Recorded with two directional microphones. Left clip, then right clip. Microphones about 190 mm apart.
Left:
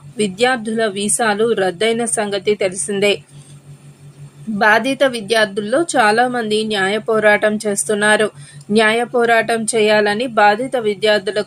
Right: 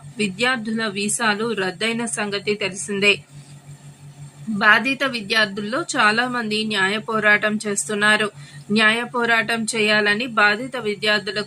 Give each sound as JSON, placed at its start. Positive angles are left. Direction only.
{"t": 0.2, "sound": "speech", "side_deg": 20}
{"t": 4.5, "sound": "speech", "side_deg": 20}